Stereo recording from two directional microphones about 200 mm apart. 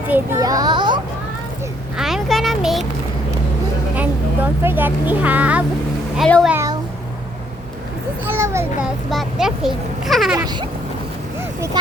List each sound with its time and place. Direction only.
0.1 s a child's voice: 15° right (ahead or behind)
2.0 s a sound: centre (ahead or behind)
4.6 s a child's voice: 10° right (ahead or behind)
6.5 s speech: 15° right (ahead or behind)
8.3 s speech: 15° right (ahead or behind)
8.8 s a child's voice: centre (ahead or behind)
10.3 s a child's voice: 20° right (ahead or behind)